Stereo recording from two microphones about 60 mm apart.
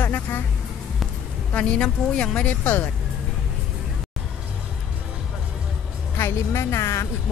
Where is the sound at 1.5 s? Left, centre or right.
Centre.